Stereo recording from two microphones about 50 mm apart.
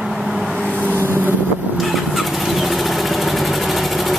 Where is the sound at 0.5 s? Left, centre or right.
Left.